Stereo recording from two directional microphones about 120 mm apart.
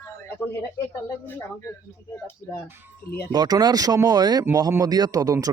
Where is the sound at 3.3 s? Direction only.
35° right (ahead or behind).